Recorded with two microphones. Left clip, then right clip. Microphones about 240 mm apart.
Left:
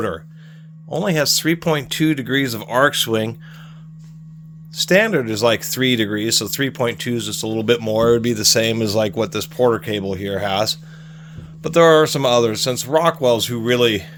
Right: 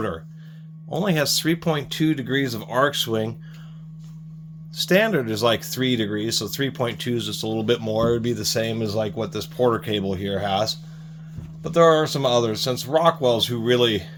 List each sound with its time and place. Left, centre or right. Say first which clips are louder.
0.9 s speech: left 4 dB; left
4.7 s speech: left 4 dB; left